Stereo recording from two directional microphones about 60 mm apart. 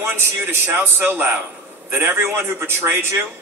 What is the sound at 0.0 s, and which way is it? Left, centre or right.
A man's voice, right.